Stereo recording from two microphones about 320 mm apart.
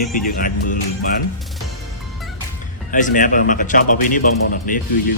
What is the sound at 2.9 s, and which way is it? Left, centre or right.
Speech, left.